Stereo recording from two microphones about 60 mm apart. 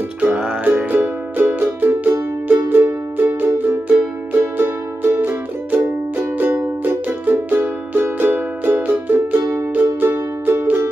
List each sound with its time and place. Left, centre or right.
0.2 s music: right
0.7 s music: right